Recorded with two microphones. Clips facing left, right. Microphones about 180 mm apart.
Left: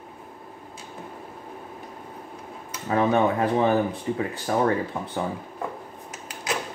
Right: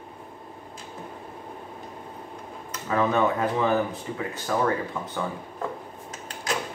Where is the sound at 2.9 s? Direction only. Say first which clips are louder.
Left 2 dB; 30° left (ahead or behind).